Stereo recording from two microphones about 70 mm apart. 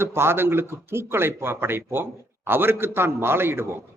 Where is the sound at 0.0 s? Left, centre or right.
Right.